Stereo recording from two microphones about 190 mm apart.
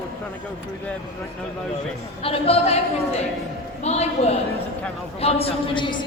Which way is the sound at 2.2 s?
30° left (ahead or behind).